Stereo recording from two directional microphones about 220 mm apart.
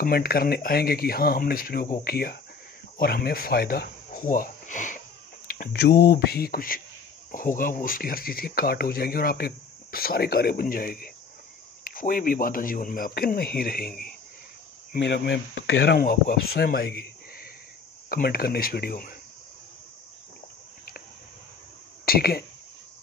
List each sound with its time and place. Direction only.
0.0 s speech: 45° left (ahead or behind)
22.0 s speech: 45° left (ahead or behind)